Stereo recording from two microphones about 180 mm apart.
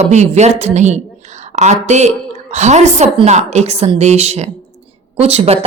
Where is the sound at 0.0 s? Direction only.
40° right (ahead or behind).